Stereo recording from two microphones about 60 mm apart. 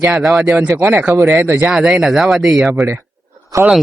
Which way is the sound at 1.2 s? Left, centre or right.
Right.